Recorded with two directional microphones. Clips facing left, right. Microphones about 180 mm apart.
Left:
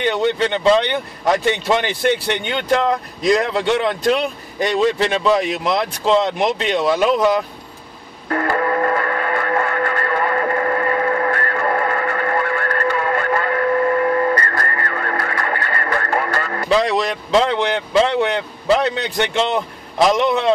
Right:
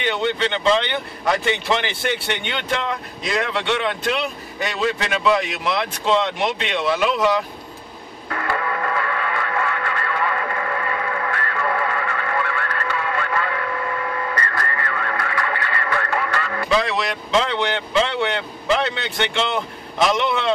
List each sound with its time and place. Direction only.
0.1 s speech: 40° left (ahead or behind)
2.1 s speech: 40° left (ahead or behind)
8.3 s music: 40° left (ahead or behind)
20.1 s speech: 40° left (ahead or behind)